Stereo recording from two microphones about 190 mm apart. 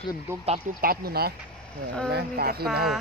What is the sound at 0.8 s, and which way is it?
Speech, 55° right (ahead or behind).